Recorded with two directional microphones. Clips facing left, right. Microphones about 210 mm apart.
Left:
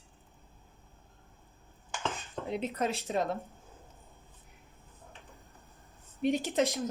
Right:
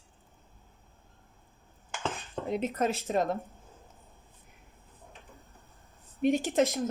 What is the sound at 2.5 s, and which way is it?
Speech, 45° right (ahead or behind).